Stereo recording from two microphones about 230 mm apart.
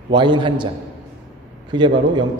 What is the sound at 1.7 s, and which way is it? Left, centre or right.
Speech, centre.